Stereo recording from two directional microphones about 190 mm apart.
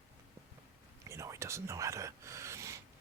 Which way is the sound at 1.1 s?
15° right (ahead or behind).